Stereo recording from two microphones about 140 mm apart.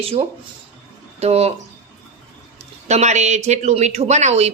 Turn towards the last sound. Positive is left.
turn(degrees=-50)  # may be behind; listen again after turning